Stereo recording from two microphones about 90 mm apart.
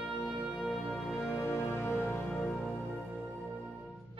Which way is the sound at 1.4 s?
25° left (ahead or behind).